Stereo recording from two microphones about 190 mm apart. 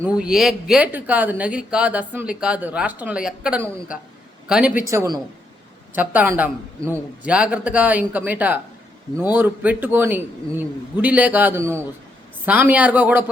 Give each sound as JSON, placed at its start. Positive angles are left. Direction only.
{"t": 0.0, "sound": "a man's voice", "side_deg": -5}
{"t": 4.9, "sound": "a man's voice", "side_deg": -20}